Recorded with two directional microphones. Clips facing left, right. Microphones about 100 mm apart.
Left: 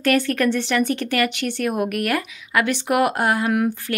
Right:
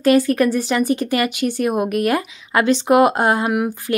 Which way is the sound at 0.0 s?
20° right (ahead or behind).